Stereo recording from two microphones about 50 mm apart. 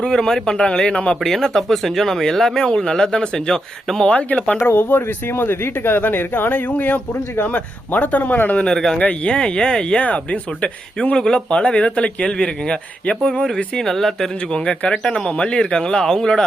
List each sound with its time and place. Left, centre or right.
0.0 s speech: centre
1.2 s speech: centre
4.0 s speech: left
4.8 s speech: left
8.7 s speech: centre
9.0 s speech: left
9.3 s speech: centre
13.7 s speech: centre
14.5 s speech: centre